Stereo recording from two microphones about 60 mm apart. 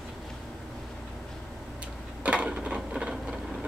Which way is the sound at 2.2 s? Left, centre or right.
Right.